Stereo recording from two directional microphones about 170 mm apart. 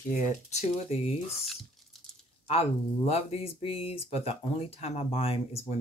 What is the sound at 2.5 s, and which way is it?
Speech, 35° left (ahead or behind).